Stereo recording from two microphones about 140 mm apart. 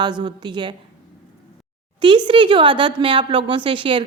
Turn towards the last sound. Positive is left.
turn(degrees=-35)  # may be behind; listen again after turning